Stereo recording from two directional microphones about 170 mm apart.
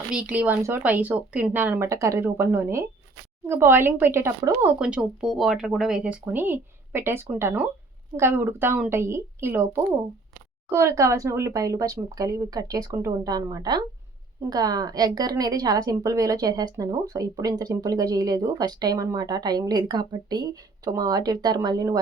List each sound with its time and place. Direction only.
0.1 s a woman's voice: 5° right (ahead or behind); by 21.9 s 20° right (ahead or behind)